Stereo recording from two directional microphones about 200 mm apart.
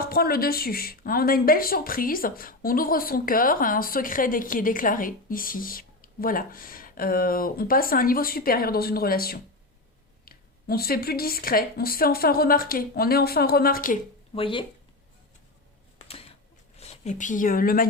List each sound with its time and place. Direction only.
0.0 s a woman's voice: 50° left (ahead or behind)
14.3 s speech: 25° left (ahead or behind)
16.7 s speech: 30° left (ahead or behind)